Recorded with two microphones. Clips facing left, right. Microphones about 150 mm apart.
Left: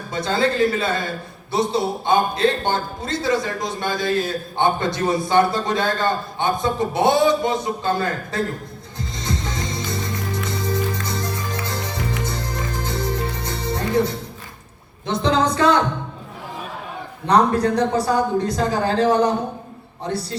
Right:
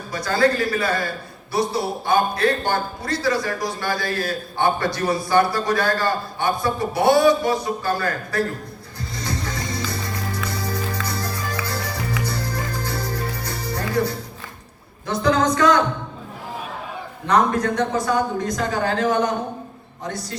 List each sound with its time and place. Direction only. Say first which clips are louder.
0.1 s a man's voice: right 1 dB; 25° left (ahead or behind)
9.0 s music: left 1 dB; 20° left (ahead or behind)
15.0 s speech: even; 25° left (ahead or behind)
17.2 s speech: left 2 dB; 35° left (ahead or behind)